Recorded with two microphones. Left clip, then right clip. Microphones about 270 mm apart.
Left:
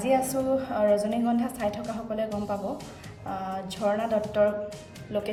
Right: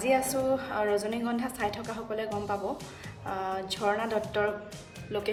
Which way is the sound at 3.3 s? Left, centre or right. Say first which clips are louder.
Even; centre.